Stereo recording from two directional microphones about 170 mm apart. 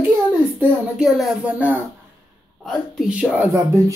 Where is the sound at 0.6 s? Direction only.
Centre (ahead or behind).